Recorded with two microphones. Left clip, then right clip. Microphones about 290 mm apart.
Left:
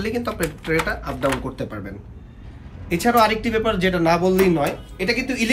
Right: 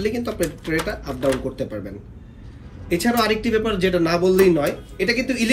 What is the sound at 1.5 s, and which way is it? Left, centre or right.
Speech, centre.